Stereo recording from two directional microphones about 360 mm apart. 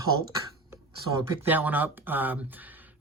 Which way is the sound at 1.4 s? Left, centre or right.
Centre.